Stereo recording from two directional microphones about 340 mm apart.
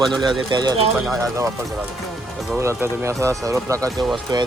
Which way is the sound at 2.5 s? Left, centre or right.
Centre.